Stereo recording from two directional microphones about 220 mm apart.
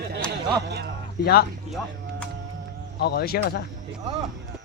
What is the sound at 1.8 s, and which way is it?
Speech, 10° left (ahead or behind).